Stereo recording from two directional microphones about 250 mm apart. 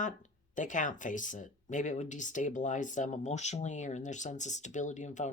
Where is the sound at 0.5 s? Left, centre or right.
Left.